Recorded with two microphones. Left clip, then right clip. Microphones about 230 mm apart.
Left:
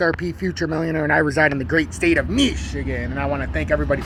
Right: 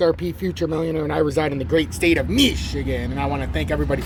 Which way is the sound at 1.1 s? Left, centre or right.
Left.